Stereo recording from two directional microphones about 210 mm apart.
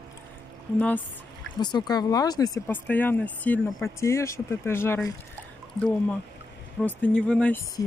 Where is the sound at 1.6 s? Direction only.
20° left (ahead or behind).